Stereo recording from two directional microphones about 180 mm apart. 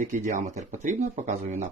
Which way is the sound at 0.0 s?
45° right (ahead or behind).